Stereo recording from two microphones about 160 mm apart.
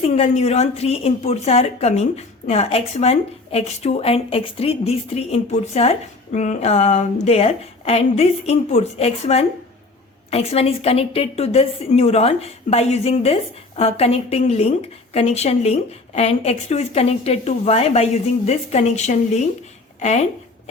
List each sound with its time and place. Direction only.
0.1 s a woman's voice: 40° left (ahead or behind)